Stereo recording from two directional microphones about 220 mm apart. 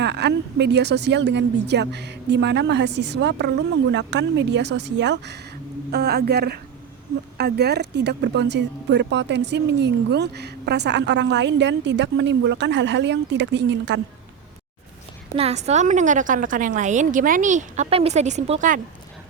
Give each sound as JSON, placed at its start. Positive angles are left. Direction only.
{"t": 0.0, "sound": "speech", "side_deg": -50}
{"t": 15.3, "sound": "a woman's voice", "side_deg": -25}